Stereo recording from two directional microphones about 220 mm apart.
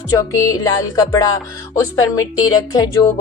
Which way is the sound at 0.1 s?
15° left (ahead or behind).